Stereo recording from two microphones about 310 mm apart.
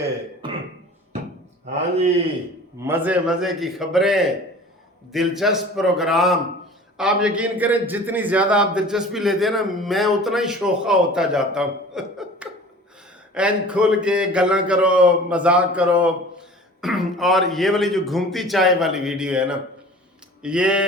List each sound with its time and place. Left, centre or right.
0.4 s throat clearing: centre
2.8 s speech: centre